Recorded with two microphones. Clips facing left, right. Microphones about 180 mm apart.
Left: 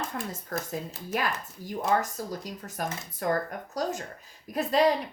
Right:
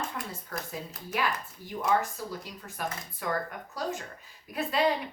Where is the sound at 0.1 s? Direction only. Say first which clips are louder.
Left 4 dB; 45° left (ahead or behind).